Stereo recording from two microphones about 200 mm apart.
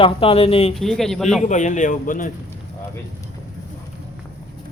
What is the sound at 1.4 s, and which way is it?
Speech, 40° left (ahead or behind).